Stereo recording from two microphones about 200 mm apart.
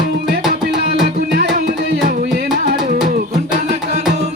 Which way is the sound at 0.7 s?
55° right (ahead or behind).